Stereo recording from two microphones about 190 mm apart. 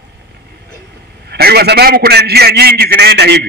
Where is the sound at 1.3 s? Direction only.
55° right (ahead or behind).